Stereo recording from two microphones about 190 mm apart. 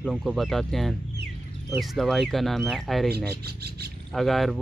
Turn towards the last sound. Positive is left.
turn(degrees=0)  # may be behind; listen again after turning